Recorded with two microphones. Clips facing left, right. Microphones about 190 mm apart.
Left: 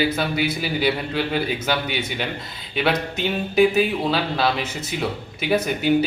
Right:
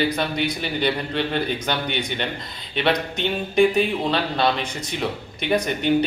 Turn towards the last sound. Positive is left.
turn(degrees=5)  # may be behind; listen again after turning